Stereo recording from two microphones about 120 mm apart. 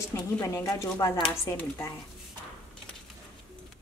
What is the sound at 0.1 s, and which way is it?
A woman's voice, 25° left (ahead or behind).